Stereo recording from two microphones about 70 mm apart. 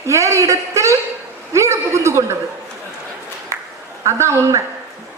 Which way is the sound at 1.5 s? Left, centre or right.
Right.